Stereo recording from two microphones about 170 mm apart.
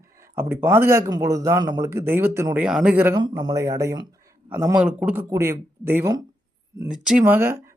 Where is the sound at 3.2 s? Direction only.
25° right (ahead or behind).